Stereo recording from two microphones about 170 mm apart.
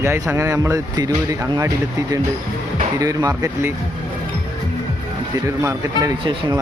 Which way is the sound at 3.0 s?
20° right (ahead or behind).